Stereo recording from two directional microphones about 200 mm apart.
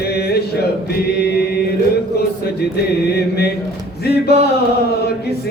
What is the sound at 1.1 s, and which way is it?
Mantra, 55° left (ahead or behind).